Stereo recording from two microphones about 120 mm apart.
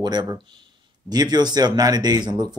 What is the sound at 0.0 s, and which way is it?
Speech, 35° right (ahead or behind).